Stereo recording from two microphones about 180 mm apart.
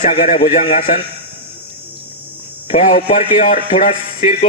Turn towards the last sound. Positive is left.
turn(degrees=40)  # may be behind; listen again after turning